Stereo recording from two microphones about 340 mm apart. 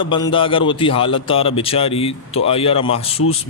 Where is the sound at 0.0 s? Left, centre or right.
Centre.